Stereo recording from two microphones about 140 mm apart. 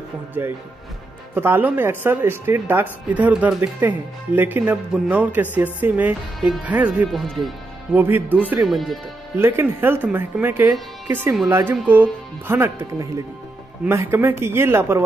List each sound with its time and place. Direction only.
0.4 s speech: 15° right (ahead or behind)
7.1 s speech: centre (ahead or behind)
7.9 s speech: 15° right (ahead or behind)
8.6 s speech: centre (ahead or behind)
9.4 s speech: 15° right (ahead or behind)